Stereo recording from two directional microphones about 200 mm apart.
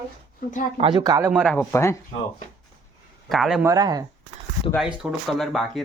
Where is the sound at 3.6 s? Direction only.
20° right (ahead or behind).